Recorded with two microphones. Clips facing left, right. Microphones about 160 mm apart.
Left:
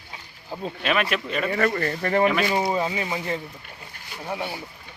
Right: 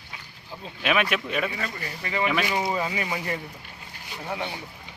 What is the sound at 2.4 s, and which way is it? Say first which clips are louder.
Speech: left 3 dB; 20° left (ahead or behind).